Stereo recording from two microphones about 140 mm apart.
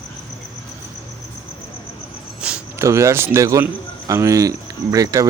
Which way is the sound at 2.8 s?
20° right (ahead or behind).